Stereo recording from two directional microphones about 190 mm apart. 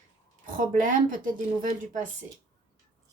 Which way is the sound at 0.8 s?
45° right (ahead or behind).